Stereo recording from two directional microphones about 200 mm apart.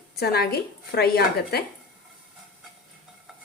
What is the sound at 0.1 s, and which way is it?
Speech, 50° left (ahead or behind).